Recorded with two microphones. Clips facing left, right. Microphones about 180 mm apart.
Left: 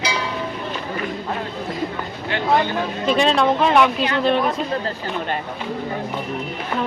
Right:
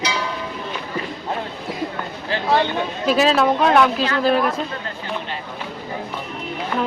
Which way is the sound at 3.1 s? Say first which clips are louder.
Right 1 dB; 5° right (ahead or behind).